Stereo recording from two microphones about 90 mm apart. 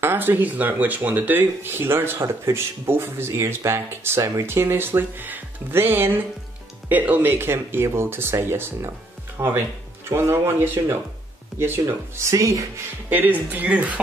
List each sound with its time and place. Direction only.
0.0 s speech: 25° right (ahead or behind)
10.2 s speech: 25° right (ahead or behind)
13.1 s speech: 20° right (ahead or behind)